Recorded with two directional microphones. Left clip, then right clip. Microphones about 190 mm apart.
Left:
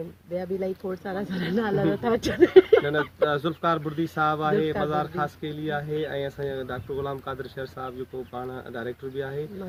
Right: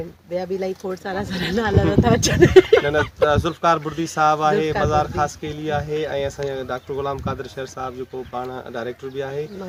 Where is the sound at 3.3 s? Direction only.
10° left (ahead or behind).